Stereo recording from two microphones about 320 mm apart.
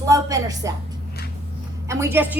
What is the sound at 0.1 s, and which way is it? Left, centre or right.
Speech, centre.